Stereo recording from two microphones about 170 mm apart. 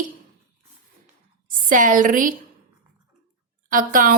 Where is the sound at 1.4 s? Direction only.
55° right (ahead or behind).